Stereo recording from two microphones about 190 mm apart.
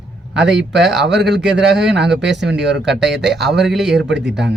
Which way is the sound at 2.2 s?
65° right (ahead or behind).